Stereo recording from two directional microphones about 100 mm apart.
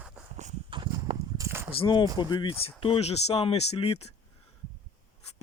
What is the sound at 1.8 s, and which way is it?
Speech, 45° left (ahead or behind).